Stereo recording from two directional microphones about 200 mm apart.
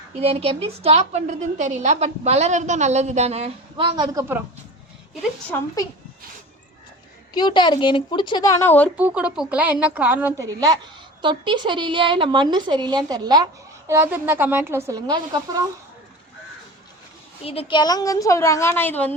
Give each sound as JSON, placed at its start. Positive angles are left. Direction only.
{"t": 0.2, "sound": "a woman's voice", "side_deg": -30}
{"t": 5.5, "sound": "speech", "side_deg": 10}
{"t": 7.3, "sound": "a woman's voice", "side_deg": 20}
{"t": 9.0, "sound": "a woman's voice", "side_deg": -5}
{"t": 11.2, "sound": "a woman's voice", "side_deg": -25}
{"t": 17.4, "sound": "speech", "side_deg": 30}